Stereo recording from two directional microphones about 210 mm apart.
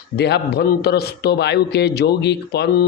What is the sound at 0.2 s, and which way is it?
A man's voice, 50° left (ahead or behind).